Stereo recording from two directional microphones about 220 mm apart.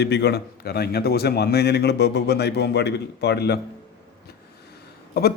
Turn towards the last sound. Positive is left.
turn(degrees=45)  # may be behind; listen again after turning